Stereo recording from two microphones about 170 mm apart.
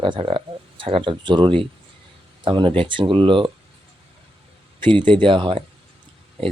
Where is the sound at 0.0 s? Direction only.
30° right (ahead or behind).